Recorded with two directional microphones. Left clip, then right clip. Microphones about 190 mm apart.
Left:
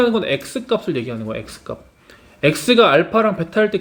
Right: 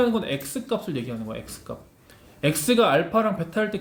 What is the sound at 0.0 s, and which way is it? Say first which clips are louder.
Speech: left 7 dB; 25° left (ahead or behind).